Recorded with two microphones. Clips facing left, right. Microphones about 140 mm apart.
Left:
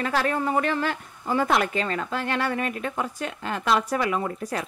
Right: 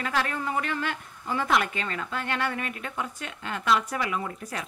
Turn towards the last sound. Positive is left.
turn(degrees=40)  # may be behind; listen again after turning